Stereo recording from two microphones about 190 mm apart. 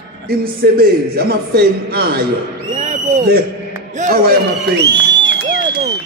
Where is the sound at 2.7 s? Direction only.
35° right (ahead or behind).